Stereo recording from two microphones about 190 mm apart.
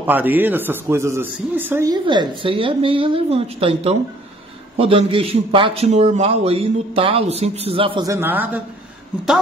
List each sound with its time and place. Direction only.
0.0 s a man's voice: 10° right (ahead or behind); by 8.1 s 25° right (ahead or behind)
8.1 s a man's voice: 10° right (ahead or behind)